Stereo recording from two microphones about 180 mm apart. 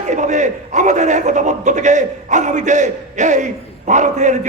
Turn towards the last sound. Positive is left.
turn(degrees=-45)  # may be behind; listen again after turning